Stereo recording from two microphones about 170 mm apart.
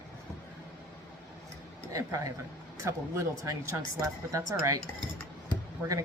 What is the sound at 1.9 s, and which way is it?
Speech, 20° right (ahead or behind).